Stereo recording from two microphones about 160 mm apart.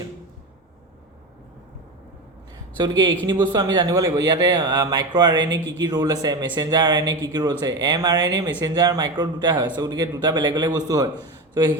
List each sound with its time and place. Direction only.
2.7 s speech: 30° right (ahead or behind)
5.4 s speech: 90° right
6.0 s speech: 20° right (ahead or behind)